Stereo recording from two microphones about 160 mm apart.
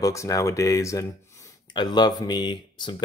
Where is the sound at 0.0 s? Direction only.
20° left (ahead or behind).